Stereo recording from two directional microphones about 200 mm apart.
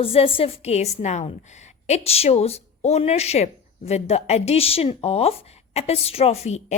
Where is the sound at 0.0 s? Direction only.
30° left (ahead or behind).